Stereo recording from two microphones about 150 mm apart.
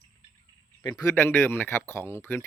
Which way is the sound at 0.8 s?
15° left (ahead or behind).